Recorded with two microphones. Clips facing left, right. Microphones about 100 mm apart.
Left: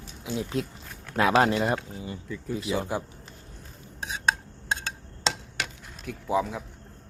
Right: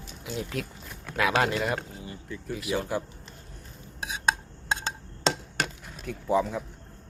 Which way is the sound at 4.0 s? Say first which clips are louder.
Even; 10° right (ahead or behind).